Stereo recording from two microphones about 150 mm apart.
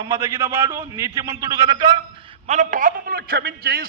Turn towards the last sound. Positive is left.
turn(degrees=-90)